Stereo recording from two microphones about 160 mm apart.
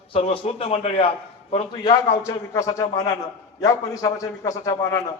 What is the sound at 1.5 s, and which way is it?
A man's voice, 25° left (ahead or behind).